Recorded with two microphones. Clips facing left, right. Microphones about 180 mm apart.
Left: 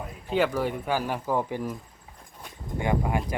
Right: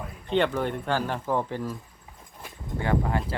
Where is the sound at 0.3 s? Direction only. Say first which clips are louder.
Even; 5° left (ahead or behind).